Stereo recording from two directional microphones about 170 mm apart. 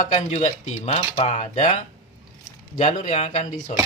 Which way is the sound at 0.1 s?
45° left (ahead or behind).